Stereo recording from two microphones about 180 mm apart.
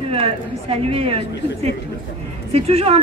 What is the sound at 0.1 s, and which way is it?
A woman's voice, 30° right (ahead or behind).